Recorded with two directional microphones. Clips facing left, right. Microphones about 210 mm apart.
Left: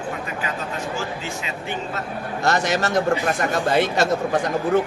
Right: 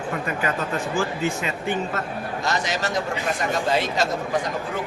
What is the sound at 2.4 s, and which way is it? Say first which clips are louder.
Speech: left 6 dB; 60° left (ahead or behind).